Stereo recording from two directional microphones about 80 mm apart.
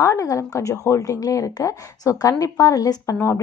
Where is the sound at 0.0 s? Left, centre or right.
Left.